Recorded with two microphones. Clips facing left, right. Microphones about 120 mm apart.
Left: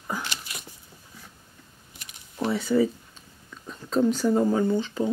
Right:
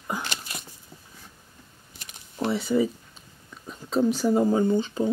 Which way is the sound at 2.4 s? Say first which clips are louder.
Left 1 dB; 15° right (ahead or behind).